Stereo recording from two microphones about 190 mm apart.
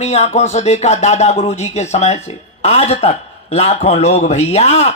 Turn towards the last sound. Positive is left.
turn(degrees=35)  # may be behind; listen again after turning